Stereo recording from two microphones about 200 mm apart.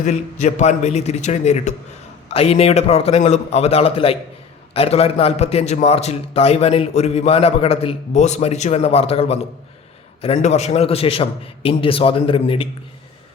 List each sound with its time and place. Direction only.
0.0 s a man's voice: 35° left (ahead or behind)